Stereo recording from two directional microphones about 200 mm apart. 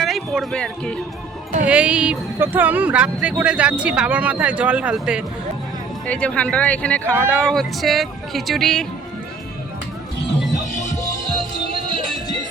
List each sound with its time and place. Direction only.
0.0 s speech: centre (ahead or behind)
6.1 s speech: 5° left (ahead or behind)
10.7 s music: 35° left (ahead or behind)